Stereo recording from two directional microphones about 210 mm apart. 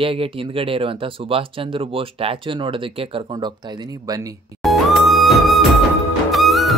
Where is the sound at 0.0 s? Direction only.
25° right (ahead or behind).